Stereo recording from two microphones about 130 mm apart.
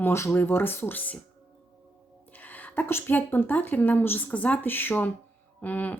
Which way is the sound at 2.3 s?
15° left (ahead or behind).